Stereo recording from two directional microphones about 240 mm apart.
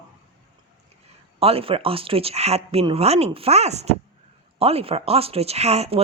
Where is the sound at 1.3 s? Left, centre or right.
Right.